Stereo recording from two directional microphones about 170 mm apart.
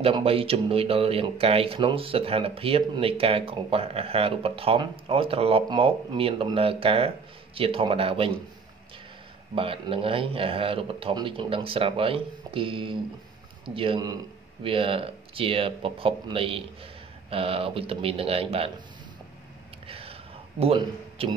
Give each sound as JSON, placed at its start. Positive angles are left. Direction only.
{"t": 0.0, "sound": "speech", "side_deg": -35}
{"t": 9.6, "sound": "speech", "side_deg": -30}
{"t": 19.9, "sound": "a sound", "side_deg": -35}